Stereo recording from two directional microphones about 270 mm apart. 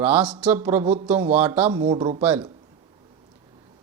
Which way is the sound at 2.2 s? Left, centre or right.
Centre.